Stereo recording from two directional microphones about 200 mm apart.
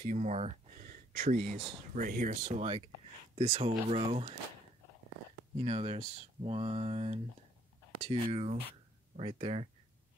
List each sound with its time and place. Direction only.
0.0 s speech: 35° right (ahead or behind)
5.6 s speech: 30° right (ahead or behind)